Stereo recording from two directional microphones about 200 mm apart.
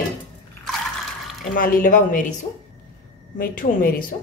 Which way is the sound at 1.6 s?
45° left (ahead or behind).